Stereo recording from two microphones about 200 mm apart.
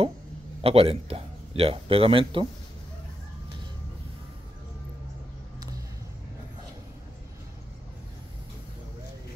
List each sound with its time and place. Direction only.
0.6 s a man's voice: 30° right (ahead or behind)